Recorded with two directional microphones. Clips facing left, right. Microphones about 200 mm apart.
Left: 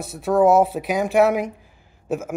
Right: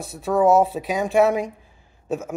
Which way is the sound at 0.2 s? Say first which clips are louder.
Left 1 dB; centre (ahead or behind).